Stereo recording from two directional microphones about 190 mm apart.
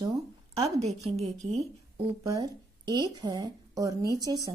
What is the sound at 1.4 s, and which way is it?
Speech, 35° right (ahead or behind).